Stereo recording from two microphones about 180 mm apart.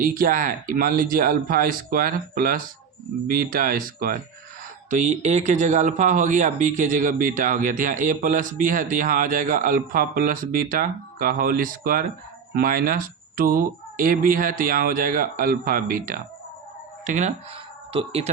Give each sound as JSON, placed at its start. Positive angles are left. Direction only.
{"t": 0.0, "sound": "speech", "side_deg": -50}